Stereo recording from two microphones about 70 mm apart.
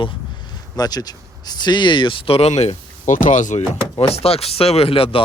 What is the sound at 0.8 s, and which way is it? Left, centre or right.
Speech, left.